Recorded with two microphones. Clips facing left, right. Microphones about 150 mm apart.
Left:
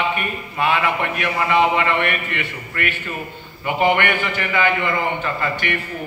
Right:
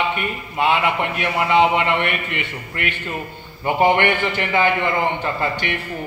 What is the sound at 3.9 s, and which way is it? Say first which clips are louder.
A man's voice: right 2 dB; 25° right (ahead or behind).